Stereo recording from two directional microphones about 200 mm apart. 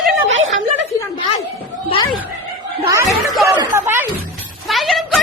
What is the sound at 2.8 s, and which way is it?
Chatter, 15° right (ahead or behind).